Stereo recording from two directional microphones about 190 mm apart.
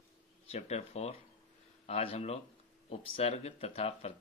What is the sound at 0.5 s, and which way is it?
Speech, 35° left (ahead or behind).